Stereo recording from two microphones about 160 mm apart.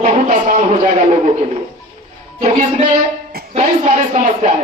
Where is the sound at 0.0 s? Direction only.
45° right (ahead or behind).